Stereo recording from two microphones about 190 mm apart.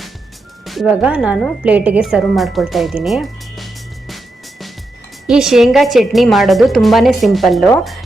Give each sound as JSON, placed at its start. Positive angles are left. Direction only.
{"t": 0.6, "sound": "a woman's voice", "side_deg": 0}
{"t": 5.2, "sound": "a woman's voice", "side_deg": 0}